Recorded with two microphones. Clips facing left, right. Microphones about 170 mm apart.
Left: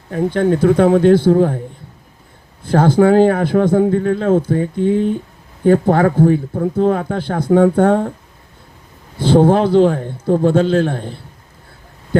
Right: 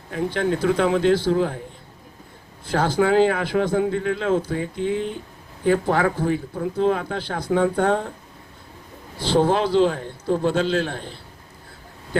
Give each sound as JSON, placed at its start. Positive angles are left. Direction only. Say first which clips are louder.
{"t": 0.1, "sound": "a man's voice", "louder": "left 7 dB", "side_deg": 45}
{"t": 2.6, "sound": "a man's voice", "louder": "left 8 dB", "side_deg": 55}
{"t": 9.1, "sound": "a man's voice", "louder": "left 7 dB", "side_deg": 55}